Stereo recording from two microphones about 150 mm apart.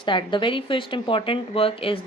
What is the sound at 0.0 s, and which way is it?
Speech, 35° left (ahead or behind).